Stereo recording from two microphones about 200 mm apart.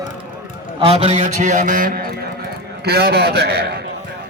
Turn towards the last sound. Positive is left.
turn(degrees=-55)  # may be behind; listen again after turning